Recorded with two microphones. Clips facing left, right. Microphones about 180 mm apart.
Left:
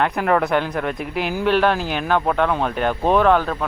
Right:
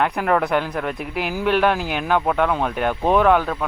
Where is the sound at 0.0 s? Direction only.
Centre (ahead or behind).